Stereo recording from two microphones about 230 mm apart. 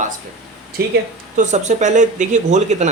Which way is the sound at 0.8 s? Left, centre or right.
Right.